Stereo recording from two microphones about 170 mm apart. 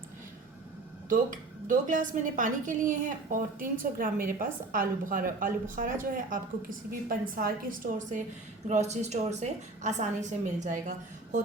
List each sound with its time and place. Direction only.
1.1 s a woman's voice: 50° right (ahead or behind)